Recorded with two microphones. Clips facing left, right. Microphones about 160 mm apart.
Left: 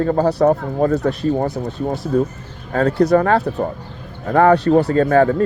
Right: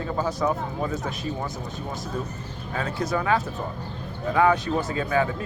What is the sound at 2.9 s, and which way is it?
Speech, 65° left (ahead or behind).